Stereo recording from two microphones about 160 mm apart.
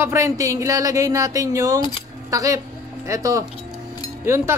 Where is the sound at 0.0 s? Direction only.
15° right (ahead or behind).